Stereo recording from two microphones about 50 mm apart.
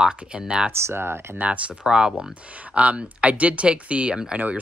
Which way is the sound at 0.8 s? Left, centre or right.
Right.